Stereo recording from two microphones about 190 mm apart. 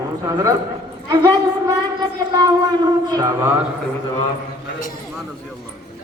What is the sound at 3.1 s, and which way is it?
Music, 15° right (ahead or behind).